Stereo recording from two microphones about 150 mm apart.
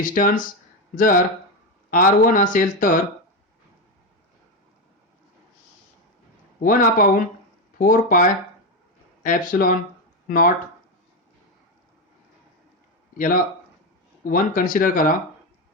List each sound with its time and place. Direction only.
0.0 s speech: 65° left (ahead or behind)
6.6 s speech: 70° left (ahead or behind)
13.1 s speech: 65° left (ahead or behind)